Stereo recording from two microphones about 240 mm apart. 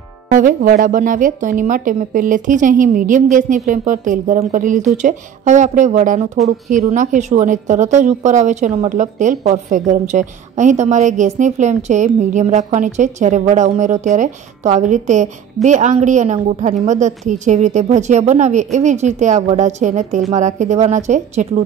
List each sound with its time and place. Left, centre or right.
0.3 s a woman's voice: right